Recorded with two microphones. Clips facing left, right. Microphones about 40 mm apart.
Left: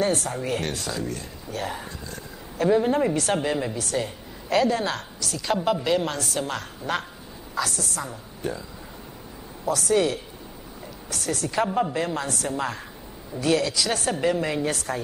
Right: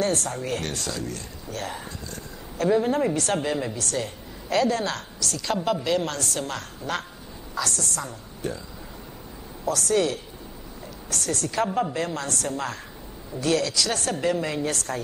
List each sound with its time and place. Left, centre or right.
0.0 s a woman's voice: centre
9.7 s speech: centre